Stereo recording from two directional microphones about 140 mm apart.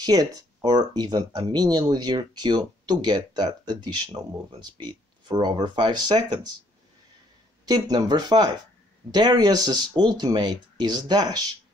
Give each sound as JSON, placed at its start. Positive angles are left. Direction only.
{"t": 0.0, "sound": "speech", "side_deg": -30}
{"t": 7.6, "sound": "speech", "side_deg": -25}